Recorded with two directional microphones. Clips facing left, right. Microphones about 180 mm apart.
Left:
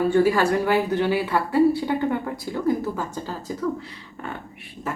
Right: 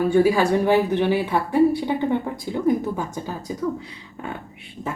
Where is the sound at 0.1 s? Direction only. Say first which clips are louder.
Right 4 dB; 10° right (ahead or behind).